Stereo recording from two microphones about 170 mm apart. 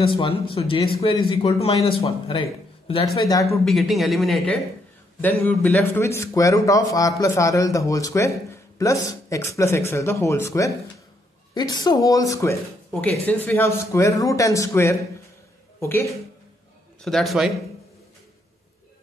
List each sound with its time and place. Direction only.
0.0 s speech: 30° left (ahead or behind)
3.2 s a woman's voice: 20° left (ahead or behind)
3.5 s speech: centre (ahead or behind)
5.2 s a man's voice: 10° left (ahead or behind)
17.0 s speech: centre (ahead or behind)